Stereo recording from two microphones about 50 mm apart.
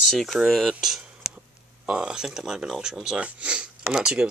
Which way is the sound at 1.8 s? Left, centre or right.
Centre.